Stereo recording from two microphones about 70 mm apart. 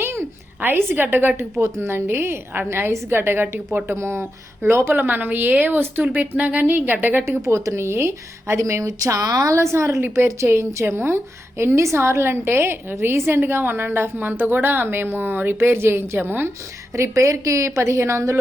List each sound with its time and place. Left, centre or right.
0.0 s a sound: right
1.5 s a woman's voice: right
7.4 s a woman's voice: right
9.6 s a woman's voice: right
16.9 s a woman's voice: right